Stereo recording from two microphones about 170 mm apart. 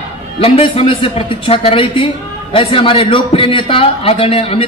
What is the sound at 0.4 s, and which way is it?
A man's voice, 35° left (ahead or behind).